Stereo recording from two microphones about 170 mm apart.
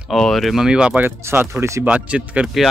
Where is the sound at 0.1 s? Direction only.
Centre (ahead or behind).